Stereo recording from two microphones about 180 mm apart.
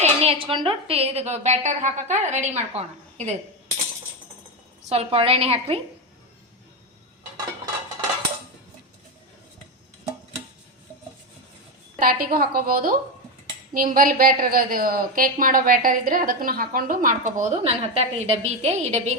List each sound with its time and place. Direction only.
0.0 s a woman's voice: 35° right (ahead or behind)
4.9 s a woman's voice: 35° right (ahead or behind)
11.9 s a woman's voice: 55° right (ahead or behind); by 19.1 s 40° right (ahead or behind)